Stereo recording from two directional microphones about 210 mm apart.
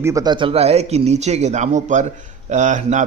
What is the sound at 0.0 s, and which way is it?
A man's voice, 15° right (ahead or behind).